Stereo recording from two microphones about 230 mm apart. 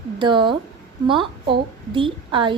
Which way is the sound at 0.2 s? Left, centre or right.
Right.